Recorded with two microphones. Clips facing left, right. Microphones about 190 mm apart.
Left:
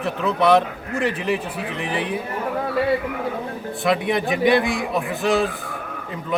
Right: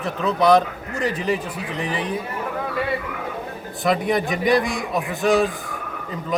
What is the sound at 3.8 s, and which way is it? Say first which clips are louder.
A man's voice: even; centre (ahead or behind).